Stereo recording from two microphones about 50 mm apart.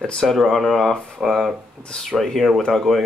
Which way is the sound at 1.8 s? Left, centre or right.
Centre.